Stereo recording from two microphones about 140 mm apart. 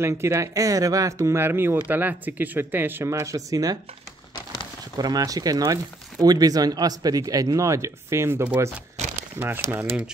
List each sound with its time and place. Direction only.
0.0 s speech: 20° right (ahead or behind)
4.9 s speech: 25° right (ahead or behind)